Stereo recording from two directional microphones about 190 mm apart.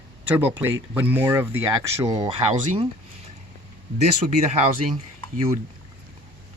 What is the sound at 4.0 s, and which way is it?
Speech, 35° right (ahead or behind).